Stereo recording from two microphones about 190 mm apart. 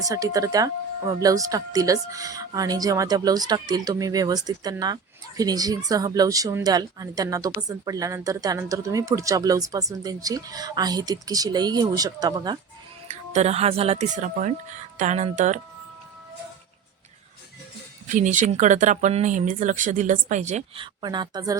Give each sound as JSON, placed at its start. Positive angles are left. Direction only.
{"t": 0.0, "sound": "speech", "side_deg": -20}
{"t": 13.1, "sound": "speech", "side_deg": -35}
{"t": 18.1, "sound": "speech", "side_deg": -40}